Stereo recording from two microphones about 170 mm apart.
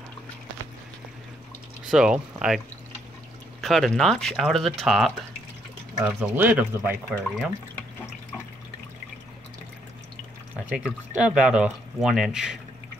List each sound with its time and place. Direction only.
1.9 s speech: 5° right (ahead or behind)
3.6 s speech: centre (ahead or behind)
10.5 s speech: 5° right (ahead or behind)